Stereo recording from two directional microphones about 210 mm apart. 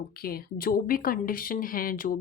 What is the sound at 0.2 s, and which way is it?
Speech, 45° left (ahead or behind).